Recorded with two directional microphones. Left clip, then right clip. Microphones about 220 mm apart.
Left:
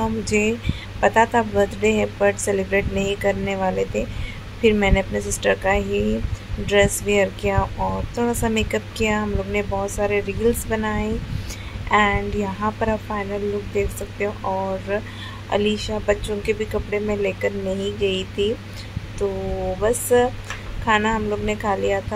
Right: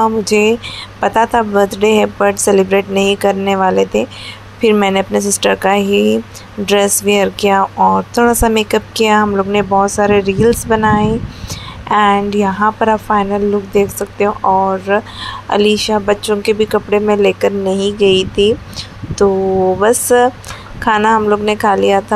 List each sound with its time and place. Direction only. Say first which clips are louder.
0.0 s a woman's voice: right 10 dB; 15° right (ahead or behind)
8.1 s a woman's voice: right 11 dB; 15° right (ahead or behind)
19.8 s a woman's voice: right 5 dB; 20° right (ahead or behind)